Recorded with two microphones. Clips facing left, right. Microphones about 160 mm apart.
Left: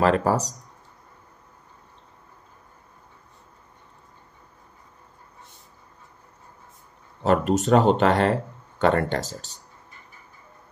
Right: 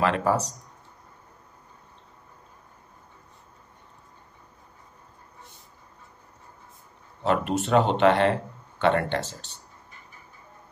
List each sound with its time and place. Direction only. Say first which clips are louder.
0.0 s speech: left 3 dB; 40° left (ahead or behind)
7.2 s speech: left 4 dB; 40° left (ahead or behind)